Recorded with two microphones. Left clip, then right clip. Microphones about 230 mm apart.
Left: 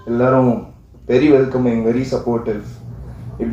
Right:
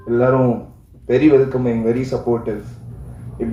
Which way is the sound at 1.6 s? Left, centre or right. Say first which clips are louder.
Left 1 dB; right.